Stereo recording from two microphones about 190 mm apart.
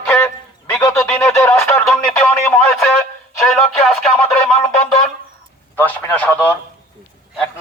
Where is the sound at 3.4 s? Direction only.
Centre (ahead or behind).